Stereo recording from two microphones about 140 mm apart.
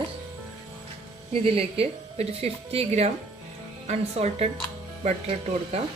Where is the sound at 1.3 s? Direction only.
45° right (ahead or behind).